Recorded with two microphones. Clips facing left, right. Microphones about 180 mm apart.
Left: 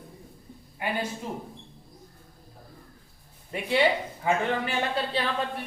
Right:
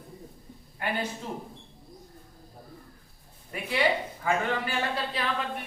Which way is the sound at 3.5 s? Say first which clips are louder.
Left 3 dB; 25° left (ahead or behind).